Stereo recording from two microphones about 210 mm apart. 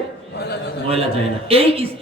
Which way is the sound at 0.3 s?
50° left (ahead or behind).